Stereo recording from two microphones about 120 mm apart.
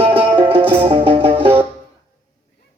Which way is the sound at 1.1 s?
50° right (ahead or behind).